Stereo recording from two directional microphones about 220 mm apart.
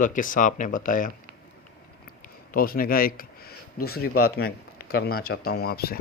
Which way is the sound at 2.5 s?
40° left (ahead or behind).